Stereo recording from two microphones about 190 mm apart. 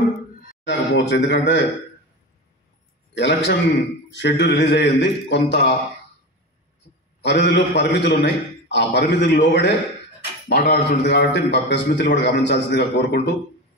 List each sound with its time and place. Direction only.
0.7 s a man's voice: 70° left (ahead or behind)
3.2 s a man's voice: 70° left (ahead or behind)
7.2 s a man's voice: 65° left (ahead or behind)
13.0 s speech: 50° left (ahead or behind)